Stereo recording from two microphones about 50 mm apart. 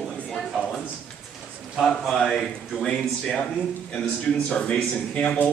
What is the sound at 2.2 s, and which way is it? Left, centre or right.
A woman's voice, centre.